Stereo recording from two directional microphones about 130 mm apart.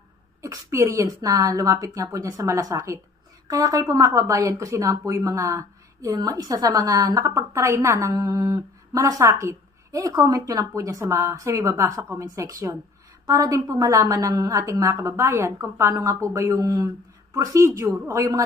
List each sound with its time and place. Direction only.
0.4 s a woman's voice: 25° right (ahead or behind)